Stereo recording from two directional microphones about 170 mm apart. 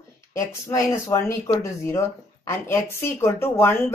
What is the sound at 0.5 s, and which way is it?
Speech, 15° left (ahead or behind).